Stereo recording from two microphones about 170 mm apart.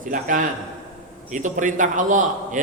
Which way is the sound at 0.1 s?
50° right (ahead or behind).